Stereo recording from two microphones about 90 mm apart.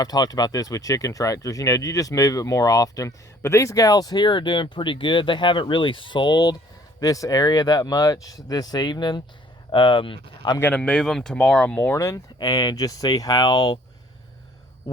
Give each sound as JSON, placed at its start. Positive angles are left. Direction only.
{"t": 0.0, "sound": "speech", "side_deg": 45}
{"t": 7.0, "sound": "speech", "side_deg": 40}
{"t": 9.7, "sound": "speech", "side_deg": 70}
{"t": 10.8, "sound": "speech", "side_deg": 10}
{"t": 11.9, "sound": "speech", "side_deg": 40}